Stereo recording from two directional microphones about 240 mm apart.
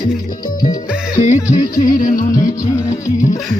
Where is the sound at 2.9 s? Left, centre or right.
Left.